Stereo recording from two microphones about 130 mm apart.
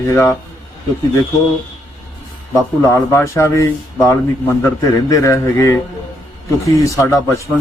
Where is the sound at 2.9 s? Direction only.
20° left (ahead or behind).